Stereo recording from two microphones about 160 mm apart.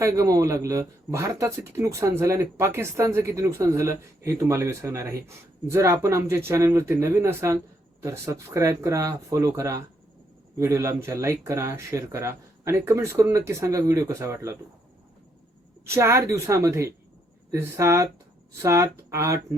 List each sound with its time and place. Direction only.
0.0 s speech: 20° right (ahead or behind)
15.9 s speech: 15° right (ahead or behind)